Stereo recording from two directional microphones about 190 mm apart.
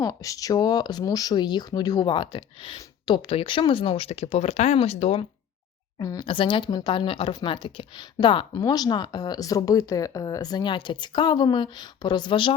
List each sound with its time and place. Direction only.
0.0 s speech: 15° left (ahead or behind); by 5.2 s 35° left (ahead or behind)
6.0 s speech: 20° left (ahead or behind)